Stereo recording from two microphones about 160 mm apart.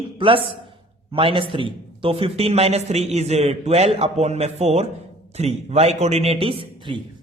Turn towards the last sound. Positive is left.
turn(degrees=-30)  # may be behind; listen again after turning